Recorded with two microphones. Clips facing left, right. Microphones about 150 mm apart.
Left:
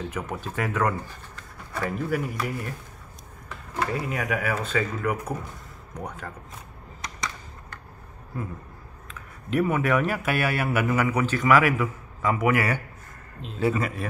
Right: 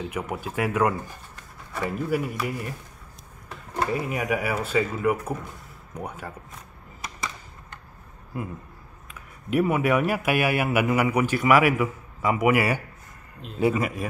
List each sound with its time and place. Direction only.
0.1 s a man's voice: 10° right (ahead or behind)
3.9 s a man's voice: 15° right (ahead or behind)
9.5 s a man's voice: 10° right (ahead or behind)